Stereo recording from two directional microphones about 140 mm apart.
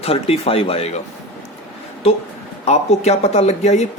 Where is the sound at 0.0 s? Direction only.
45° left (ahead or behind).